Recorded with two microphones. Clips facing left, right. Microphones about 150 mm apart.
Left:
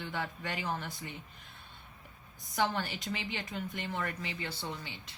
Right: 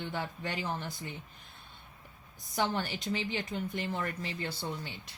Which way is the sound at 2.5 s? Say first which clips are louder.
Even; 35° right (ahead or behind).